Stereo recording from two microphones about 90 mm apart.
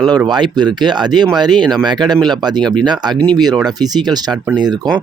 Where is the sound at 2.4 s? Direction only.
50° right (ahead or behind).